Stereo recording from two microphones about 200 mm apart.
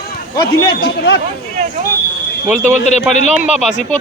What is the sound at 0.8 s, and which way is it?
Speech, 65° left (ahead or behind).